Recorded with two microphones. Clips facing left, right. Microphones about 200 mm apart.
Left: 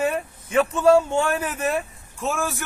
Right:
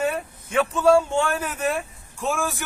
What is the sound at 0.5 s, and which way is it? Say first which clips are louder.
A man's voice: left 1 dB; 5° left (ahead or behind).